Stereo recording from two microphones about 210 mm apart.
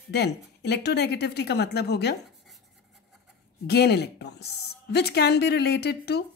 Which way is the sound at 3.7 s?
50° left (ahead or behind).